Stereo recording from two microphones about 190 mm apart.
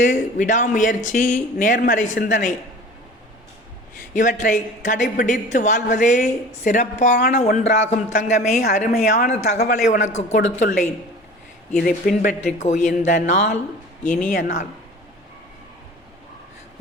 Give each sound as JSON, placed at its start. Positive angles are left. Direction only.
{"t": 0.0, "sound": "speech", "side_deg": 40}
{"t": 4.1, "sound": "a woman's voice", "side_deg": 40}
{"t": 11.7, "sound": "a woman's voice", "side_deg": 50}